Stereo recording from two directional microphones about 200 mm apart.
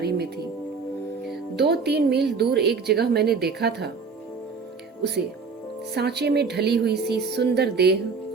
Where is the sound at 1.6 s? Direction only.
55° right (ahead or behind).